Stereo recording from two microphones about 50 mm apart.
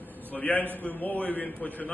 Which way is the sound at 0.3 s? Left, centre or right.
Left.